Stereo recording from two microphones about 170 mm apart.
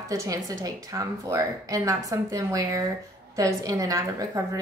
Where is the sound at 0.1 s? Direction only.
20° right (ahead or behind).